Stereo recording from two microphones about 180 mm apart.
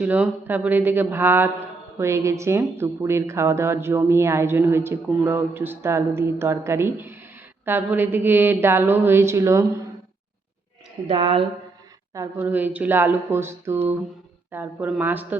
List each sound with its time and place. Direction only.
0.0 s a woman's voice: 10° right (ahead or behind)
11.0 s a woman's voice: 30° right (ahead or behind)
12.1 s a woman's voice: 15° right (ahead or behind)